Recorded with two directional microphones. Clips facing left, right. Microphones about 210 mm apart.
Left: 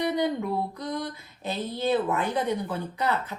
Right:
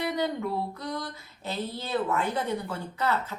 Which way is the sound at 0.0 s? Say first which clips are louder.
Left 3 dB; 15° left (ahead or behind).